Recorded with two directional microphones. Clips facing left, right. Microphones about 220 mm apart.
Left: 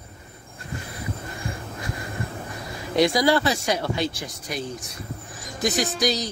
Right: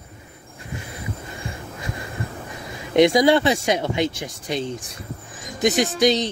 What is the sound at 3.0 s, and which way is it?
Speech, 20° right (ahead or behind).